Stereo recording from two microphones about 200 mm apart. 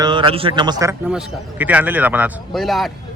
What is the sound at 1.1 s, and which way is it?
A man's voice, 5° right (ahead or behind).